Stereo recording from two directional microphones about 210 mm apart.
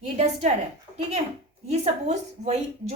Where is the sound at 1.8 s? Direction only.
35° right (ahead or behind).